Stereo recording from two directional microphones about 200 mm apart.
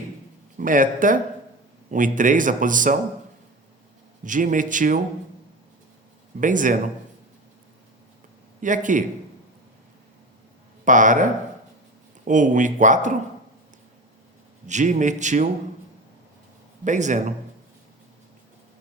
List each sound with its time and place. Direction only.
0.6 s speech: 40° right (ahead or behind)
4.2 s speech: 40° right (ahead or behind)
6.4 s speech: 40° right (ahead or behind)
8.6 s speech: 40° right (ahead or behind)
10.8 s speech: 40° right (ahead or behind)
14.7 s speech: 40° right (ahead or behind)
16.8 s speech: 40° right (ahead or behind)